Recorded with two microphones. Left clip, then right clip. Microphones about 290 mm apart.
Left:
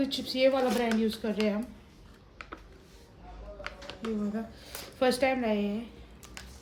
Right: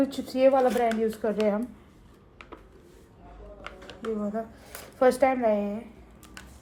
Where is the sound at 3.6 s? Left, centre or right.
Centre.